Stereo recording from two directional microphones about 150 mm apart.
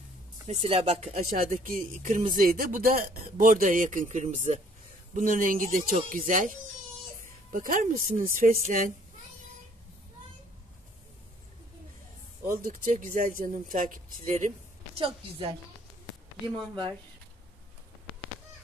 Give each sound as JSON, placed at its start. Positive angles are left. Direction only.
{"t": 0.5, "sound": "speech", "side_deg": -40}
{"t": 1.6, "sound": "speech", "side_deg": -65}
{"t": 7.5, "sound": "speech", "side_deg": -65}
{"t": 12.4, "sound": "speech", "side_deg": -65}
{"t": 15.0, "sound": "a woman's voice", "side_deg": -35}
{"t": 16.5, "sound": "a woman's voice", "side_deg": -30}